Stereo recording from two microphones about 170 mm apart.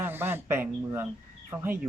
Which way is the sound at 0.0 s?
15° right (ahead or behind).